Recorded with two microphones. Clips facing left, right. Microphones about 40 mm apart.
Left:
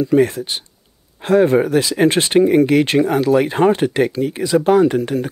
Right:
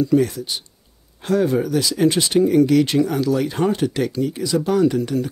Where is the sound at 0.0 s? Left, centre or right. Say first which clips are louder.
Left 3 dB; left.